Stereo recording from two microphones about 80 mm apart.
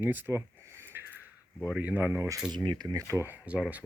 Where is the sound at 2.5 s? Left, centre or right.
Right.